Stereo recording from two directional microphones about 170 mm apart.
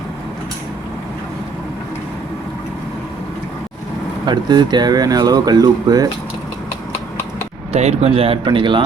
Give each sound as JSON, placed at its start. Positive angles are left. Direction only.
{"t": 4.3, "sound": "speech", "side_deg": -25}
{"t": 7.7, "sound": "speech", "side_deg": -40}